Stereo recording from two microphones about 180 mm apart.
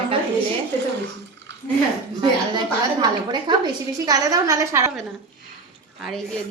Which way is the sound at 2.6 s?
25° right (ahead or behind).